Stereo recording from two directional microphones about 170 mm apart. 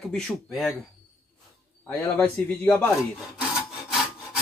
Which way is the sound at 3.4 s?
Centre (ahead or behind).